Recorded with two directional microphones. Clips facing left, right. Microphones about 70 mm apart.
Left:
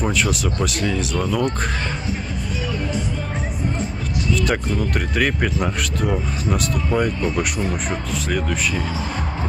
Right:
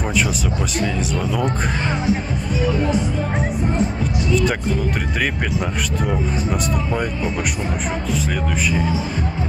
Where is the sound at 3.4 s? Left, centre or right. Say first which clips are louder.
Right 6 dB; right.